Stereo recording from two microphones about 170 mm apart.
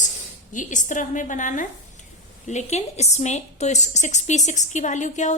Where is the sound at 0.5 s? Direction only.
45° left (ahead or behind).